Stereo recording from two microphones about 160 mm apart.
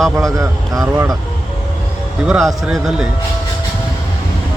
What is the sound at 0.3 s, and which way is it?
Speech, 20° right (ahead or behind).